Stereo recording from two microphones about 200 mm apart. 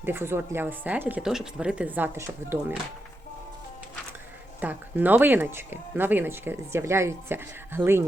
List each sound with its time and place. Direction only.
0.0 s speech: 10° right (ahead or behind)
4.6 s speech: 10° right (ahead or behind)